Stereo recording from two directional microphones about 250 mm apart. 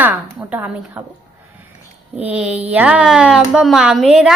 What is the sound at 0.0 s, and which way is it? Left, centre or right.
A woman's voice, centre.